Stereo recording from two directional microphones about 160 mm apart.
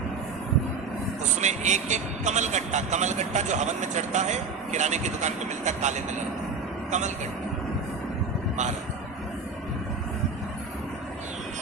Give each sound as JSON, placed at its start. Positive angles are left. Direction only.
{"t": 1.2, "sound": "a man's voice", "side_deg": -45}